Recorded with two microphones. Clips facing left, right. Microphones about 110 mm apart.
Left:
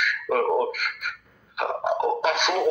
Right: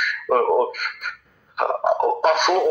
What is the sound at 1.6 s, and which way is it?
Gargling, 45° right (ahead or behind).